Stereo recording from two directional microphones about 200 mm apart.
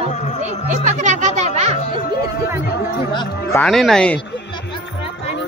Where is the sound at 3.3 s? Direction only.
50° left (ahead or behind).